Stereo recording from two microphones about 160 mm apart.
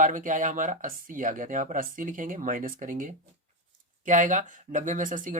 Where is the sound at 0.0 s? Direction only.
55° right (ahead or behind).